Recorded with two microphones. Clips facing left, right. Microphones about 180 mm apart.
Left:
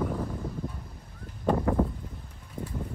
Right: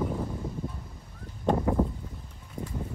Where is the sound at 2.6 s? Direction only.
5° left (ahead or behind).